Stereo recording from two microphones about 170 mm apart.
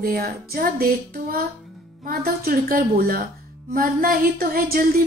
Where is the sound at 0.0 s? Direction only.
60° right (ahead or behind).